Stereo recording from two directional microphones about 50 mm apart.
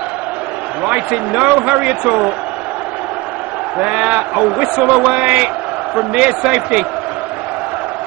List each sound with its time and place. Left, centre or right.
0.8 s a man's voice: right
3.8 s a man's voice: right